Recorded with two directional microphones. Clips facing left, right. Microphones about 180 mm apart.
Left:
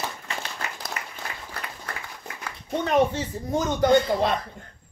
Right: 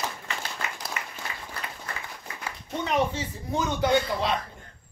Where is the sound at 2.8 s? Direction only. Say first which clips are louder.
Left 4 dB; 50° left (ahead or behind).